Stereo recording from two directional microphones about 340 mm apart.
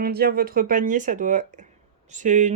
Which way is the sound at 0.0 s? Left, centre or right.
Right.